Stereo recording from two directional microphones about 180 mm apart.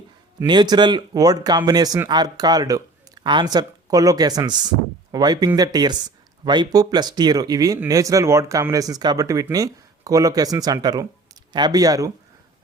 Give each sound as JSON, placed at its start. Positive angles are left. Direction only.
{"t": 0.3, "sound": "speech", "side_deg": -25}